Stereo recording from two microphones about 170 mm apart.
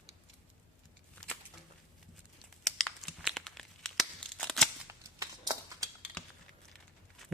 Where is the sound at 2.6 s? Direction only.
Centre (ahead or behind).